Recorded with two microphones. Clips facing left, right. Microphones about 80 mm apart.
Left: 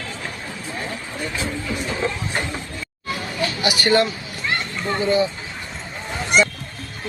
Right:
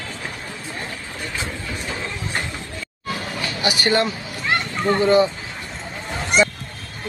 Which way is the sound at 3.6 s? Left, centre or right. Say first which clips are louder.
Left 1 dB; right.